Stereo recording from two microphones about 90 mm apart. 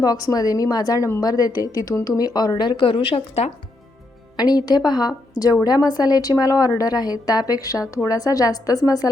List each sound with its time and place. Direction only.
0.0 s speech: 45° left (ahead or behind); by 3.4 s 85° left
4.4 s speech: 50° left (ahead or behind)